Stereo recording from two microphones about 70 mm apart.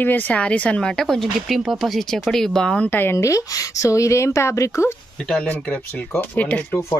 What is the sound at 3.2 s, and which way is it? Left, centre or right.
Speech, left.